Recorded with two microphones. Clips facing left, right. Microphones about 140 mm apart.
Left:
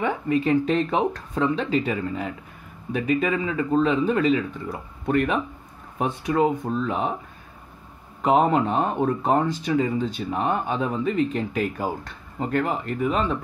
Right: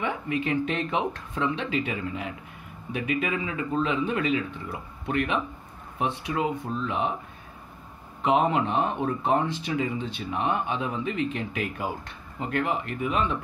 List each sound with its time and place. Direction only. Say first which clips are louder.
0.0 s speech: left 6 dB; 35° left (ahead or behind)
8.2 s speech: left 4 dB; 40° left (ahead or behind)